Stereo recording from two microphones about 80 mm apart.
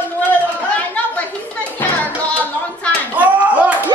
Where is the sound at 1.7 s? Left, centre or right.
Centre.